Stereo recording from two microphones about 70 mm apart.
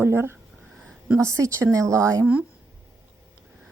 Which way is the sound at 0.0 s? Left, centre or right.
Right.